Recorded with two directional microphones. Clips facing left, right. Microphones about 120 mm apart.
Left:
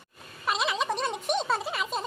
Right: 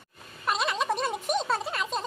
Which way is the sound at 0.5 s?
Centre (ahead or behind).